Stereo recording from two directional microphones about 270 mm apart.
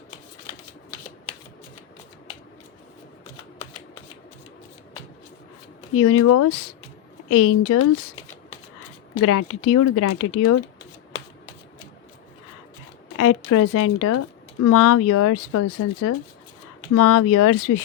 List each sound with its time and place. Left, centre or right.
5.9 s speech: left
9.2 s speech: left
13.1 s speech: left